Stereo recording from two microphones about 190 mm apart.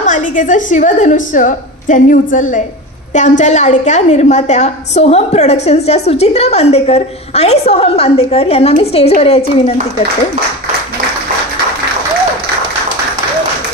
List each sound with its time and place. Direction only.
0.0 s a woman's voice: 40° left (ahead or behind)